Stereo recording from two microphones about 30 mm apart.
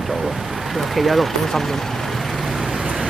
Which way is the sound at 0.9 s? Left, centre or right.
Centre.